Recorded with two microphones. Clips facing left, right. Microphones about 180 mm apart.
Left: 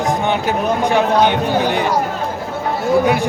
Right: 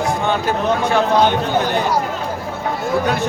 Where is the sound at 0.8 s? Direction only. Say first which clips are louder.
Left 1 dB; 15° left (ahead or behind).